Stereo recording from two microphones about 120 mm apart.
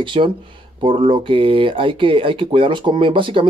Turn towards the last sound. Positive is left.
turn(degrees=-45)  # may be behind; listen again after turning